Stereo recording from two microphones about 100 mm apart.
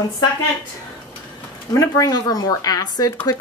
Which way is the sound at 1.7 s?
35° left (ahead or behind).